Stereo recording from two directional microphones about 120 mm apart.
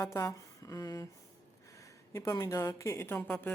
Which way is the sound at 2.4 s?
25° left (ahead or behind).